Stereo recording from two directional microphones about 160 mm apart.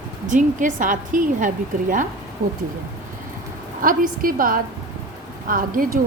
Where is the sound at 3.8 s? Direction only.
60° right (ahead or behind).